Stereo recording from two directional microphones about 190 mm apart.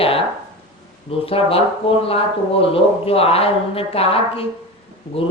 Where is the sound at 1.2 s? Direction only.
30° left (ahead or behind).